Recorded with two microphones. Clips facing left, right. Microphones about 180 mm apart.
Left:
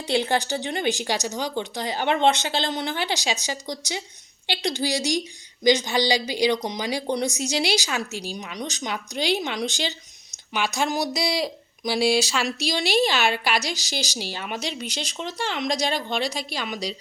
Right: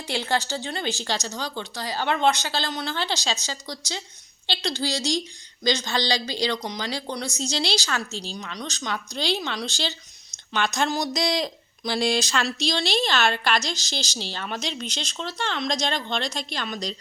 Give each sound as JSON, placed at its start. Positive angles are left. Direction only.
{"t": 0.1, "sound": "speech", "side_deg": 15}